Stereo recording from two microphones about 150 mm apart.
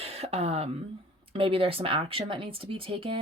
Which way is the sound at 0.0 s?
45° right (ahead or behind).